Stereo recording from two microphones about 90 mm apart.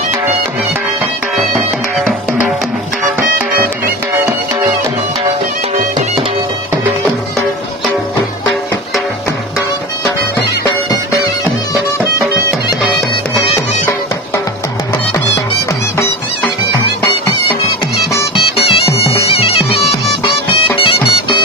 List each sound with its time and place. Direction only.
18.5 s music: 90° left
19.3 s bagpipes: 90° left
20.7 s music: 70° left (ahead or behind)